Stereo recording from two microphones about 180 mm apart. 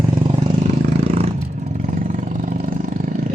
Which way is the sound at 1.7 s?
45° right (ahead or behind).